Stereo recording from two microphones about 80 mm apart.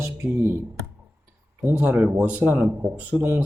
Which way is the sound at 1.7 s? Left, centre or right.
Right.